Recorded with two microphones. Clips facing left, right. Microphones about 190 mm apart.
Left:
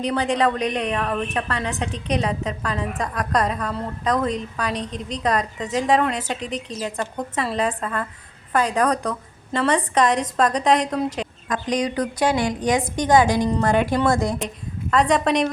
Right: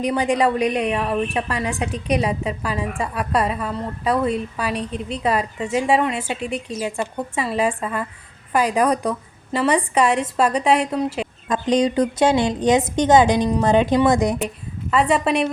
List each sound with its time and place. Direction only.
0.0 s a woman's voice: 10° right (ahead or behind)
11.4 s a woman's voice: 25° right (ahead or behind)
14.8 s a woman's voice: 5° right (ahead or behind)